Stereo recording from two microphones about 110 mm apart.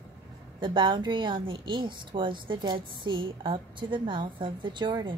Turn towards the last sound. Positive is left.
turn(degrees=-45)  # may be behind; listen again after turning